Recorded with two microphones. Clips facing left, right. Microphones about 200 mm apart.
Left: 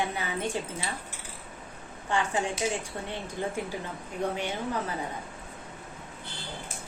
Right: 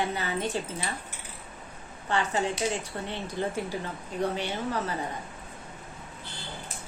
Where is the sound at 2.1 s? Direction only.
10° left (ahead or behind).